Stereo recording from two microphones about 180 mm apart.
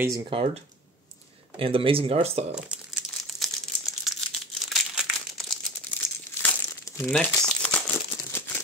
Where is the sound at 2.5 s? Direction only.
5° right (ahead or behind).